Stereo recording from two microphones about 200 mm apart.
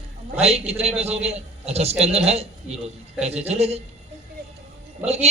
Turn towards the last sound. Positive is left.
turn(degrees=-30)  # may be behind; listen again after turning